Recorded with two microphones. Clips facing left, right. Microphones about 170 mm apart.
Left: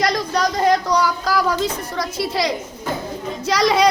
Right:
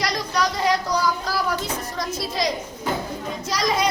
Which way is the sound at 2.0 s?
70° left (ahead or behind).